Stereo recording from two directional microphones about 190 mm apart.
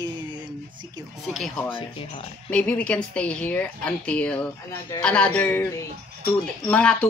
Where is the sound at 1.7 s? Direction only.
30° left (ahead or behind).